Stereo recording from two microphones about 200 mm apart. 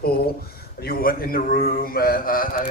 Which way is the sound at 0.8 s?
50° left (ahead or behind).